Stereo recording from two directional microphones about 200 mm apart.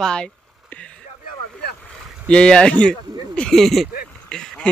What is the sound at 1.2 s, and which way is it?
Vehicle, 55° left (ahead or behind).